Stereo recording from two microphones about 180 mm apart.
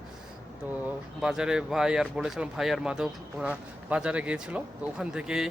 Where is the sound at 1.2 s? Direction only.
5° right (ahead or behind).